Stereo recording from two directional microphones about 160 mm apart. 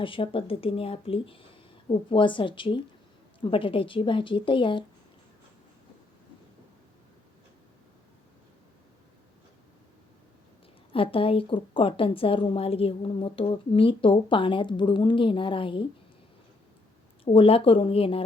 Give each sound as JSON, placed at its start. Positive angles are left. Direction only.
{"t": 0.0, "sound": "a woman's voice", "side_deg": 35}
{"t": 10.9, "sound": "a woman's voice", "side_deg": 35}
{"t": 17.2, "sound": "a woman's voice", "side_deg": 35}